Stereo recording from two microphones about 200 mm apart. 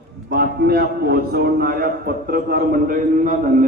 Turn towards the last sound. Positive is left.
turn(degrees=-45)  # may be behind; listen again after turning